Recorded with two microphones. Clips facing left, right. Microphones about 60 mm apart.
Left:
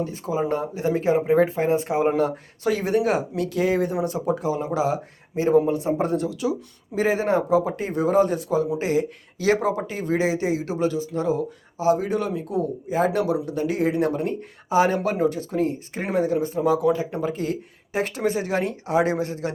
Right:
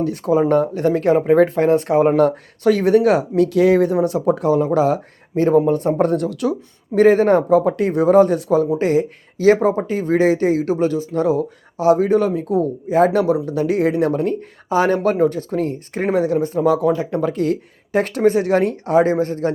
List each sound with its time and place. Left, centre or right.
0.0 s speech: right
13.1 s speech: right
17.1 s speech: right